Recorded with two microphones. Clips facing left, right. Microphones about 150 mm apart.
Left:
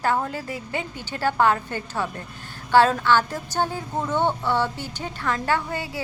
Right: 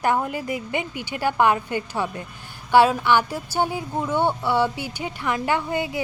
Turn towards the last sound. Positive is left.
turn(degrees=-20)  # may be behind; listen again after turning